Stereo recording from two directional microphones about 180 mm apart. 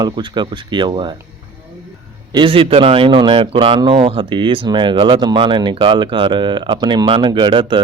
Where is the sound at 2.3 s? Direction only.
30° right (ahead or behind).